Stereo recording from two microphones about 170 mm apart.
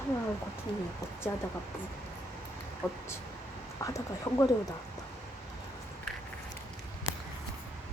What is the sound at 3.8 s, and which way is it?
Speech, 20° left (ahead or behind).